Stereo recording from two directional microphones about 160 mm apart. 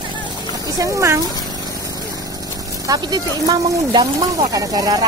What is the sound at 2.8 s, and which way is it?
Speech, 25° right (ahead or behind).